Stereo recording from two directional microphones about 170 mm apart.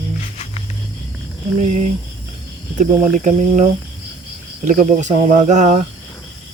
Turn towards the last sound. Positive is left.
turn(degrees=-45)  # may be behind; listen again after turning